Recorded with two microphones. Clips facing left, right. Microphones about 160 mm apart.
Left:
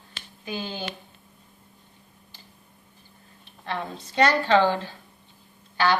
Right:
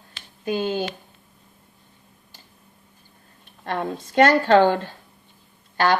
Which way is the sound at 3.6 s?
50° right (ahead or behind).